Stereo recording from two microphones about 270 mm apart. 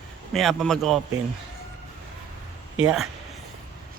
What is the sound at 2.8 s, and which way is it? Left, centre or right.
Speech, centre.